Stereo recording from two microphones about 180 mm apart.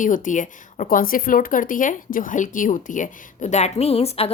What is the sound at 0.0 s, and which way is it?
Speech, 45° left (ahead or behind).